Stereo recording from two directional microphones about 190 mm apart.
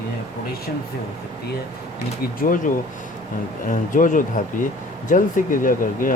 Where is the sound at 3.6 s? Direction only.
45° left (ahead or behind).